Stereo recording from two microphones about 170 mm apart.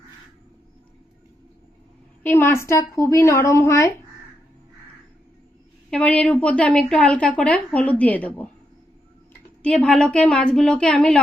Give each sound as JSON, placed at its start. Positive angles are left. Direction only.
{"t": 2.2, "sound": "a woman's voice", "side_deg": 15}
{"t": 5.9, "sound": "a woman's voice", "side_deg": 5}
{"t": 9.6, "sound": "a woman's voice", "side_deg": 5}